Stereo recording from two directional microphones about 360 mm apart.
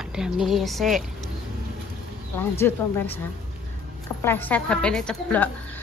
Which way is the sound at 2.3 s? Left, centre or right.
Centre.